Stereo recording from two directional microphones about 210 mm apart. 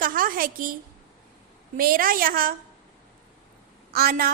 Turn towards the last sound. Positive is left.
turn(degrees=-45)  # may be behind; listen again after turning